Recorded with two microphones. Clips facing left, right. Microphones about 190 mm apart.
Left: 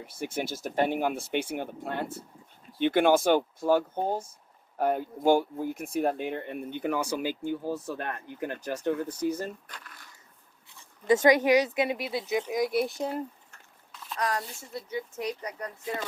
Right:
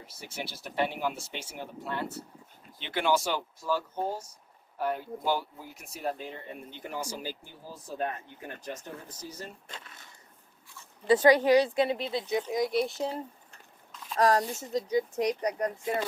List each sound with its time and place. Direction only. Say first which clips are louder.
0.1 s speech: left 8 dB; 50° left (ahead or behind)
9.6 s speech: right 1 dB; 25° right (ahead or behind)
11.1 s speech: even; 20° left (ahead or behind); by 13.2 s 5° left (ahead or behind)
14.2 s a woman's voice: right 7 dB; 40° right (ahead or behind)
14.8 s speech: right 6 dB; 15° right (ahead or behind)
15.4 s a woman's voice: right 8 dB; 35° right (ahead or behind)